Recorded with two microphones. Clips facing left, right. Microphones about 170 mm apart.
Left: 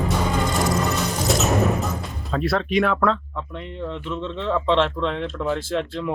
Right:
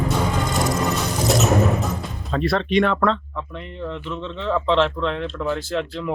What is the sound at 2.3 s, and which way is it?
Speech, centre (ahead or behind).